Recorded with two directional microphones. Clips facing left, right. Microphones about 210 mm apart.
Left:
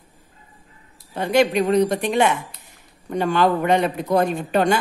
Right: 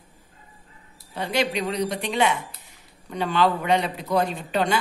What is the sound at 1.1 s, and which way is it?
A man's voice, 50° left (ahead or behind).